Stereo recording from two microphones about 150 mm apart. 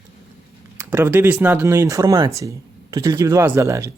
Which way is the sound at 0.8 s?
15° right (ahead or behind).